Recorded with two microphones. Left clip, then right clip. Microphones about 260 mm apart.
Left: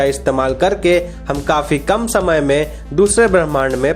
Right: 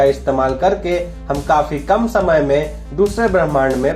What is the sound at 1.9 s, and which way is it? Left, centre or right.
Speech, left.